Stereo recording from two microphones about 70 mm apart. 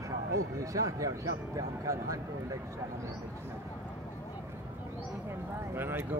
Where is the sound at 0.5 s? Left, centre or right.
Right.